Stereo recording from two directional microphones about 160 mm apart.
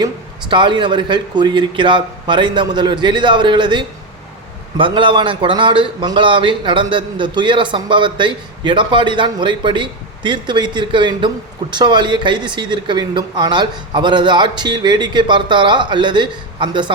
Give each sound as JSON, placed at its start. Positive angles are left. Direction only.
{"t": 0.0, "sound": "a man's voice", "side_deg": -30}